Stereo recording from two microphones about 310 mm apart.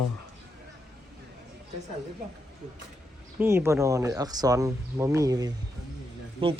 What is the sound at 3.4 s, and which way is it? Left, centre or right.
Speech, centre.